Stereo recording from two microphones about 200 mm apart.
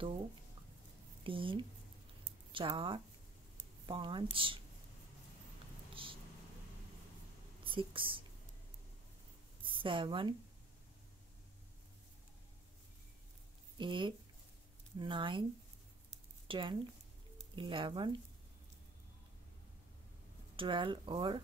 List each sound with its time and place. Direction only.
1.2 s speech: 25° right (ahead or behind)
6.0 s a sound: 25° right (ahead or behind)
7.6 s speech: 25° right (ahead or behind)
9.6 s a sound: 25° right (ahead or behind)
13.7 s speech: 25° right (ahead or behind)
16.4 s speech: 25° right (ahead or behind)
20.5 s speech: 25° right (ahead or behind)